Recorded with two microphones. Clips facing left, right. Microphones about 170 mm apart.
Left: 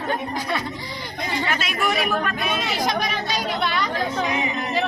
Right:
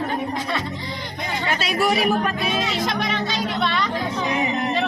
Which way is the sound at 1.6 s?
35° right (ahead or behind).